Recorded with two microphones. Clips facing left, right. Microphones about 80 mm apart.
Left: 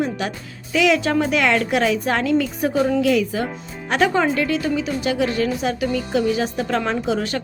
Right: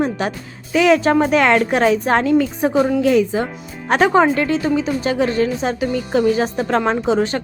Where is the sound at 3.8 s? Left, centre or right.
Right.